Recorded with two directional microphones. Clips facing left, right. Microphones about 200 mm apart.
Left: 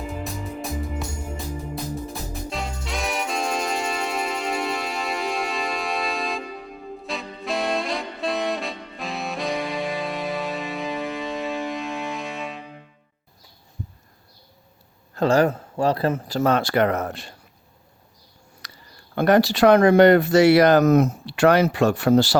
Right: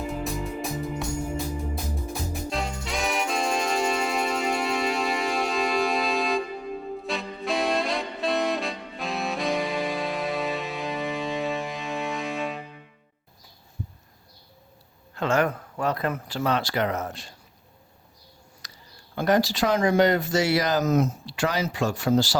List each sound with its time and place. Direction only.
0.0 s music: centre (ahead or behind)
2.5 s music: centre (ahead or behind)
7.0 s saxophone: centre (ahead or behind)
15.1 s speech: 35° left (ahead or behind); by 17.3 s 60° left (ahead or behind)
18.6 s a sound: 60° left (ahead or behind)
19.1 s speech: 60° left (ahead or behind)